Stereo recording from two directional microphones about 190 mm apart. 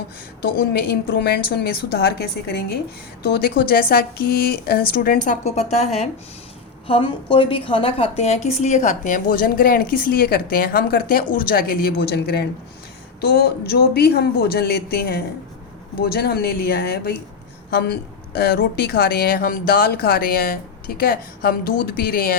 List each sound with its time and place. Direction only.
0.5 s a woman's voice: 55° left (ahead or behind)